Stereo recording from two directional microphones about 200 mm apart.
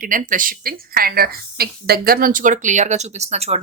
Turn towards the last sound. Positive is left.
turn(degrees=-30)  # may be behind; listen again after turning